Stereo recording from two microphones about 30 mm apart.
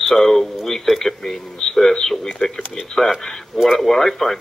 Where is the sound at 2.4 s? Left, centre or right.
Left.